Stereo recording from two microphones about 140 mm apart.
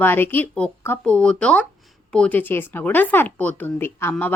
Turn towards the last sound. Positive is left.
turn(degrees=15)  # may be behind; listen again after turning